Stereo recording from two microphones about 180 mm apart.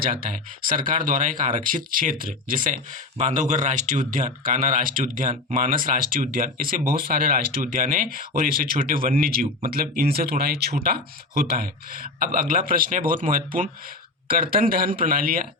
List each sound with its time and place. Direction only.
0.0 s speech: 50° right (ahead or behind)